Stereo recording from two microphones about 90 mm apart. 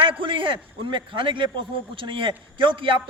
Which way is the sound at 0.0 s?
70° right (ahead or behind).